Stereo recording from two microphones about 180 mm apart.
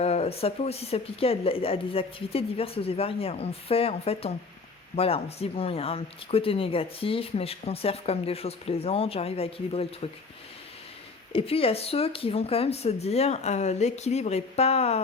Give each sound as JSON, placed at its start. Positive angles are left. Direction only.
{"t": 0.0, "sound": "speech", "side_deg": 35}
{"t": 11.3, "sound": "speech", "side_deg": 30}